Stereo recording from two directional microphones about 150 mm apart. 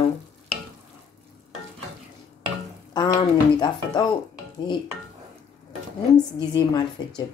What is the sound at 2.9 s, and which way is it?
Speech, 30° left (ahead or behind).